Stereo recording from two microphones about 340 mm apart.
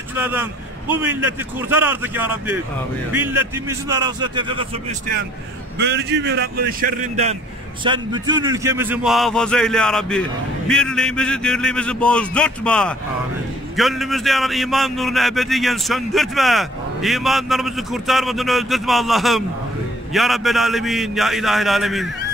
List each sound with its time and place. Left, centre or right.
0.1 s a man's voice: centre
5.8 s a man's voice: right; by 22.1 s centre